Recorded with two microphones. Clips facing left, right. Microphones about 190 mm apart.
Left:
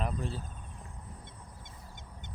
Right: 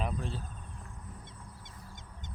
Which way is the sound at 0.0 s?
5° left (ahead or behind).